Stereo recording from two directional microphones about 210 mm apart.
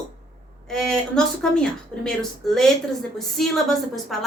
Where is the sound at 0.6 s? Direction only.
Centre (ahead or behind).